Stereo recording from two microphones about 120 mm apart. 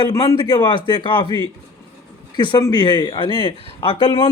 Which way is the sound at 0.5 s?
40° left (ahead or behind).